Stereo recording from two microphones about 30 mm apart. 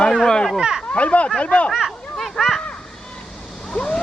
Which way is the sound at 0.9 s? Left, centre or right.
Left.